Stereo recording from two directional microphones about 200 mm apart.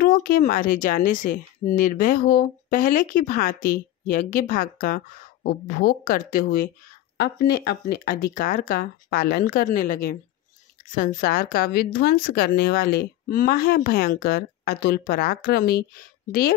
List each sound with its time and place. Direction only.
0.0 s a woman's voice: 45° left (ahead or behind)